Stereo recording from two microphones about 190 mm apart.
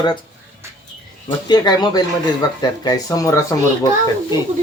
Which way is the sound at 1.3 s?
20° left (ahead or behind).